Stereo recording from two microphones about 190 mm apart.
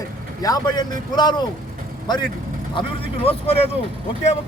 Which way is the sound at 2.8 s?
30° left (ahead or behind).